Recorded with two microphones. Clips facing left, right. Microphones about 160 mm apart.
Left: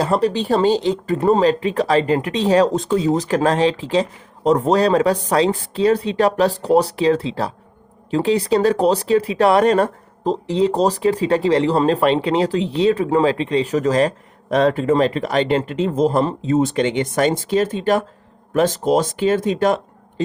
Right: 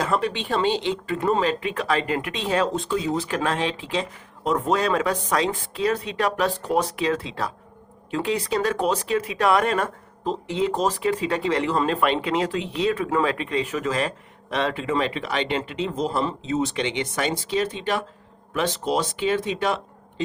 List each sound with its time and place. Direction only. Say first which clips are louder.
0.0 s speech: left 6 dB; 35° left (ahead or behind)